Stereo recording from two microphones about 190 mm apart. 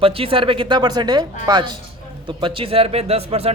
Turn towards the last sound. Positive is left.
turn(degrees=-30)  # may be behind; listen again after turning